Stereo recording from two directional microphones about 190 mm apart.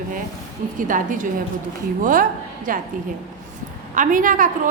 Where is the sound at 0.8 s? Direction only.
45° right (ahead or behind).